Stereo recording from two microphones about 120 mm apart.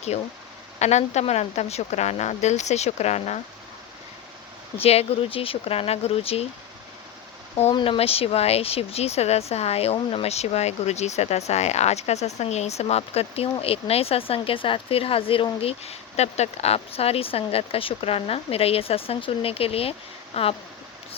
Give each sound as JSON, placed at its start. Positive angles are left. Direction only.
{"t": 0.1, "sound": "speech", "side_deg": 70}
{"t": 4.8, "sound": "speech", "side_deg": 55}
{"t": 7.9, "sound": "speech", "side_deg": 55}
{"t": 15.6, "sound": "speech", "side_deg": 60}